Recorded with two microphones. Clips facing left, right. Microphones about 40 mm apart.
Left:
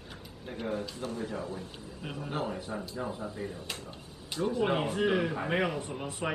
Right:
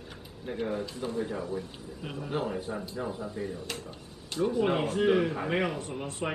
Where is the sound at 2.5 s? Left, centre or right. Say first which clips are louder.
Right 2 dB; centre.